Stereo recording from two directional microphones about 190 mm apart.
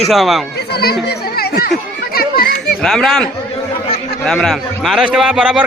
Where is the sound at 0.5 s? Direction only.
60° left (ahead or behind).